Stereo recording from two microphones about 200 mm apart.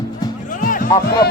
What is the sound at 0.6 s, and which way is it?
Music, 40° left (ahead or behind).